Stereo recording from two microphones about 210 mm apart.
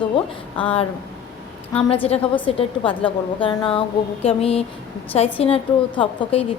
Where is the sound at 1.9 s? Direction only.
30° left (ahead or behind).